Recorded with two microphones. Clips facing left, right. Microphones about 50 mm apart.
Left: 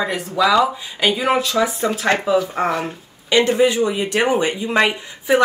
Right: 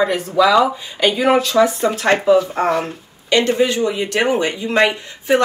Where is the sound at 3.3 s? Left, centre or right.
Centre.